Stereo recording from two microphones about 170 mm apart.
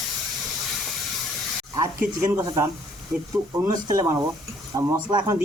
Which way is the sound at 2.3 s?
20° right (ahead or behind).